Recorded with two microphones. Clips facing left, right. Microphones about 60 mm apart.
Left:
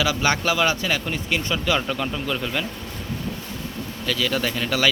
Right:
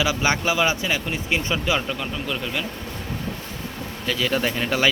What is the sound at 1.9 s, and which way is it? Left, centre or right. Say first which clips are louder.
Speech: left 2 dB; centre.